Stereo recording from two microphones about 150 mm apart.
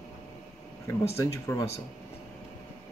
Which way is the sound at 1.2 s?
20° left (ahead or behind).